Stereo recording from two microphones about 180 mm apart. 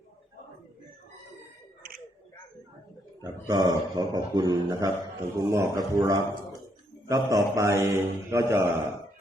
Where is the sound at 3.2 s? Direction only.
20° right (ahead or behind).